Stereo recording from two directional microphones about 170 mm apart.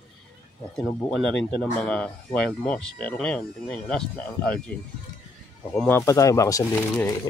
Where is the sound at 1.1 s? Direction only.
5° left (ahead or behind).